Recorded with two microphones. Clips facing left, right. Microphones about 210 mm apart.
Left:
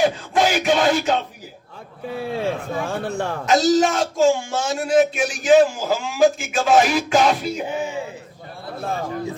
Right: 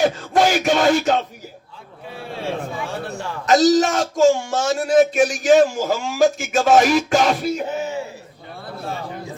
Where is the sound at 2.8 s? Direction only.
55° left (ahead or behind).